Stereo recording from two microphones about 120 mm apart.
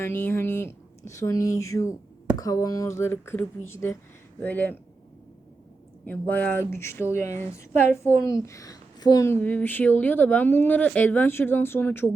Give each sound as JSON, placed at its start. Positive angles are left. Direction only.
{"t": 0.0, "sound": "a woman's voice", "side_deg": 20}
{"t": 6.1, "sound": "a woman's voice", "side_deg": 15}